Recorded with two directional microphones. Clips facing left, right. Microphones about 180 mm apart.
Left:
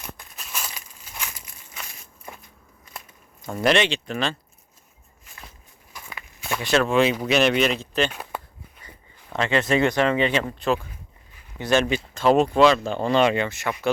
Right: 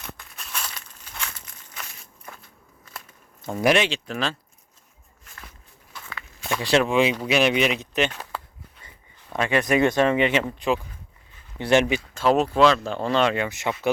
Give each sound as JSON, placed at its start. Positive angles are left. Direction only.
{"t": 0.3, "sound": "a sound", "side_deg": 5}
{"t": 3.5, "sound": "speech", "side_deg": -10}
{"t": 5.9, "sound": "walk", "side_deg": 15}
{"t": 6.7, "sound": "speech", "side_deg": -15}
{"t": 8.1, "sound": "a sound", "side_deg": 15}
{"t": 9.3, "sound": "speech", "side_deg": -15}
{"t": 12.1, "sound": "speech", "side_deg": -5}
{"t": 13.5, "sound": "speech", "side_deg": -20}